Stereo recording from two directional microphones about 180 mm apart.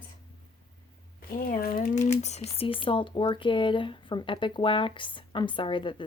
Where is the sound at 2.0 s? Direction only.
40° left (ahead or behind).